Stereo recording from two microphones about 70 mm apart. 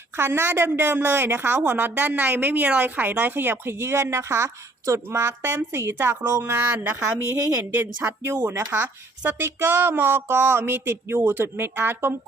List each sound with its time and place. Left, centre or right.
0.2 s a woman's voice: right
7.6 s a woman's voice: right